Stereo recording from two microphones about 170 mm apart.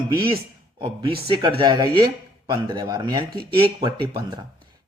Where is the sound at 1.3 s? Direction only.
30° right (ahead or behind).